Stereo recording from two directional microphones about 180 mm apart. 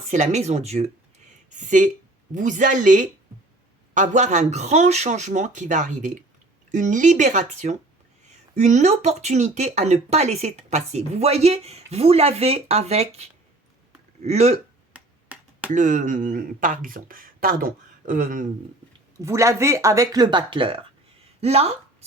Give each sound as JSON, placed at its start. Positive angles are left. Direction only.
{"t": 0.1, "sound": "speech", "side_deg": -40}
{"t": 14.3, "sound": "speech", "side_deg": -35}
{"t": 14.9, "sound": "finger snapping", "side_deg": -5}
{"t": 15.7, "sound": "speech", "side_deg": -45}
{"t": 19.2, "sound": "speech", "side_deg": -15}